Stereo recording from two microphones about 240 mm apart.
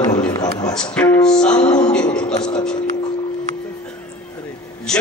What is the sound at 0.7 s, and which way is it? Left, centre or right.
A man's voice, centre.